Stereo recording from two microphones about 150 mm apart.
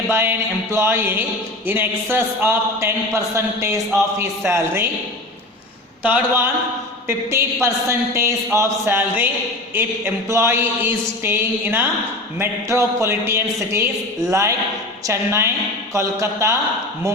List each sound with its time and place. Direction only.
0.1 s speech: 15° right (ahead or behind)
6.0 s a man's voice: 10° right (ahead or behind)